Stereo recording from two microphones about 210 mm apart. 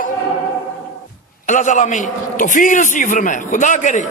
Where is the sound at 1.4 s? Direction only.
35° left (ahead or behind).